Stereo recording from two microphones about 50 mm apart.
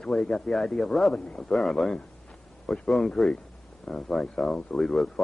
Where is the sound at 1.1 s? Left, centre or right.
Left.